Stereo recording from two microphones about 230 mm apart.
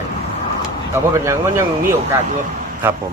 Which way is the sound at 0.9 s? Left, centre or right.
Centre.